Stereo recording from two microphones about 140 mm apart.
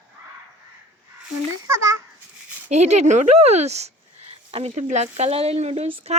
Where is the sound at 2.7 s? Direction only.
50° right (ahead or behind).